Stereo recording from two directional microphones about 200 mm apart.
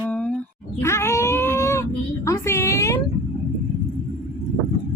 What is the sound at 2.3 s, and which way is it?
Speech, 15° left (ahead or behind).